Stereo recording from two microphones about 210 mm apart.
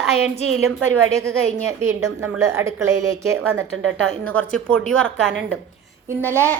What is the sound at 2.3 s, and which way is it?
A child's voice, 15° right (ahead or behind).